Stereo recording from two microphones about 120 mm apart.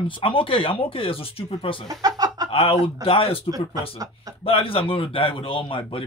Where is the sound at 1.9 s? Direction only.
35° right (ahead or behind).